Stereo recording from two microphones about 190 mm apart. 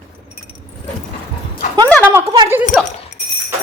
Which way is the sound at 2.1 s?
15° right (ahead or behind).